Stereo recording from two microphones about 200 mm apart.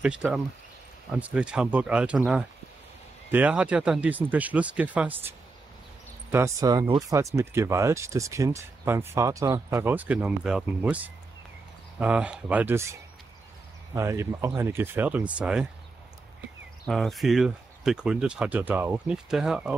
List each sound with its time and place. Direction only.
0.0 s speech: 5° right (ahead or behind)
6.3 s speech: 15° right (ahead or behind)
16.8 s speech: centre (ahead or behind)